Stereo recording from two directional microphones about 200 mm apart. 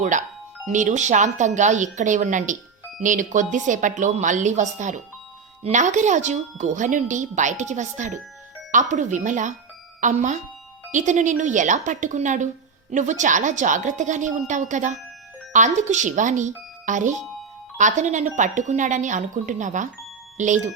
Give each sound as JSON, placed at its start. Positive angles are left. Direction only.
{"t": 0.7, "sound": "speech", "side_deg": -40}